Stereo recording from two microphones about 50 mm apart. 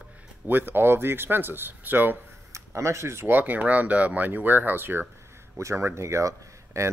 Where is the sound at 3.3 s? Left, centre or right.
Right.